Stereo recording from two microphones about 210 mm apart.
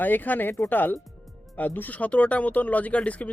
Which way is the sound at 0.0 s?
10° left (ahead or behind).